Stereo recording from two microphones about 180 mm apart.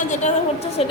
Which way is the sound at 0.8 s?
35° left (ahead or behind).